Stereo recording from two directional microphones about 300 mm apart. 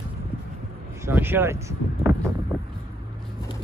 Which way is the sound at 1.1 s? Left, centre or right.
Centre.